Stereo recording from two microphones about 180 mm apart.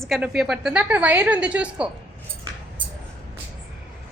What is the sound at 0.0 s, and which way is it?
A woman's voice, centre (ahead or behind).